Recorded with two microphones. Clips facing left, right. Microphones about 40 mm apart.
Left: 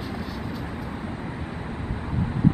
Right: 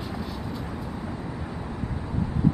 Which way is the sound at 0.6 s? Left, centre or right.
Left.